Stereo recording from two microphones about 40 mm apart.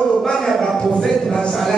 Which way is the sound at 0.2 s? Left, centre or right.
Centre.